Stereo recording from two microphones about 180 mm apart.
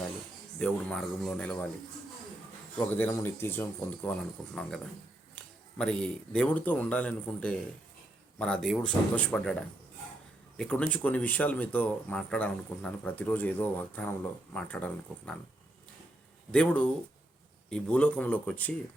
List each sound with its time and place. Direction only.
0.6 s speech: 5° left (ahead or behind)
2.7 s speech: 10° left (ahead or behind)
16.5 s speech: 5° left (ahead or behind)